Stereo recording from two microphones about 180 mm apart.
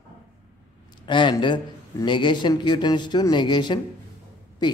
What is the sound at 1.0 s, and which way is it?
A man's voice, 25° left (ahead or behind).